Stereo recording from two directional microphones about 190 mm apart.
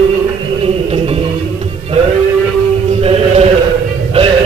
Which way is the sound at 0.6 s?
30° right (ahead or behind).